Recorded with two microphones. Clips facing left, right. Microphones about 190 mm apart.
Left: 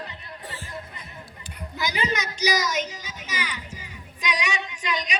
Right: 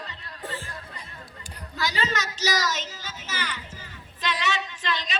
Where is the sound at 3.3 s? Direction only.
10° left (ahead or behind).